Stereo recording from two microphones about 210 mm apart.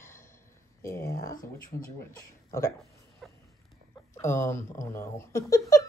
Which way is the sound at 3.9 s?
15° left (ahead or behind).